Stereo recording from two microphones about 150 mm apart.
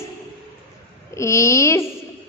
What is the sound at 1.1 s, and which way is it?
Speech, 20° left (ahead or behind).